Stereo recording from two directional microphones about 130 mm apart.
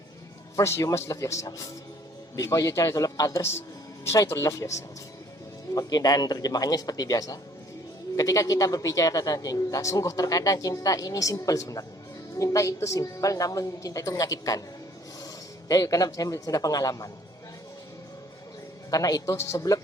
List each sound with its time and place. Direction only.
0.5 s a man's voice: 20° left (ahead or behind)
15.7 s a man's voice: 25° left (ahead or behind)
18.9 s a man's voice: 30° left (ahead or behind)